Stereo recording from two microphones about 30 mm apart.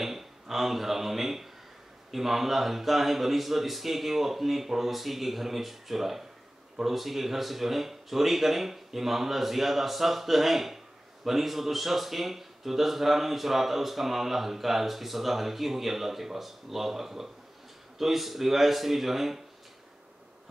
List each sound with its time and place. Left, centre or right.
0.0 s speech: centre